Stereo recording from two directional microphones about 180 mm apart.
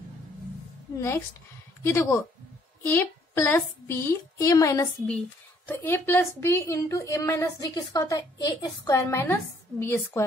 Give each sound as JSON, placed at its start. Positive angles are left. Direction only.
{"t": 0.9, "sound": "a woman's voice", "side_deg": 15}